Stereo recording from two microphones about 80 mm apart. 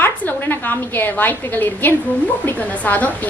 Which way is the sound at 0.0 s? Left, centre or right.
Left.